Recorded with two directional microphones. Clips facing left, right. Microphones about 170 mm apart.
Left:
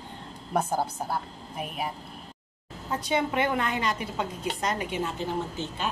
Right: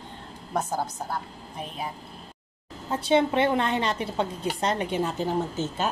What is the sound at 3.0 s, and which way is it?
A woman's voice, 25° right (ahead or behind).